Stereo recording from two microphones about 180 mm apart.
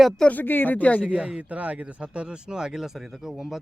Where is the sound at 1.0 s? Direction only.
5° right (ahead or behind).